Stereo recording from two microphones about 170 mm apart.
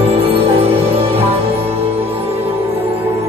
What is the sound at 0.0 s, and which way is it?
Music, 35° right (ahead or behind).